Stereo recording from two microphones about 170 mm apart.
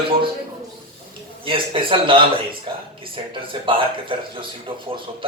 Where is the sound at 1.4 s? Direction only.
30° right (ahead or behind).